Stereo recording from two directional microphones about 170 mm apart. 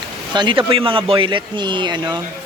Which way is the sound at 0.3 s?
30° right (ahead or behind).